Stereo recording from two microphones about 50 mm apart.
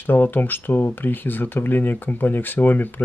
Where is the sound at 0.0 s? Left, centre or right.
Left.